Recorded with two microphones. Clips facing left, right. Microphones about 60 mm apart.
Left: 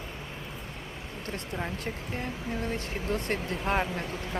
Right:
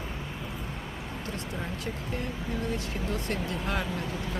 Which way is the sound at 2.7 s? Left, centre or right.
Left.